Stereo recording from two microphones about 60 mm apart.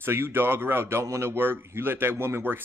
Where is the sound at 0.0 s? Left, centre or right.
Right.